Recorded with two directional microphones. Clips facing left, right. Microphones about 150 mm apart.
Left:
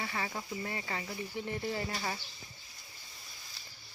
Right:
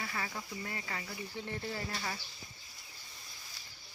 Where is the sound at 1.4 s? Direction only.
15° left (ahead or behind).